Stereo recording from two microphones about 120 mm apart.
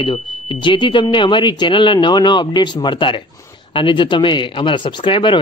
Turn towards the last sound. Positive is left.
turn(degrees=45)  # may be behind; listen again after turning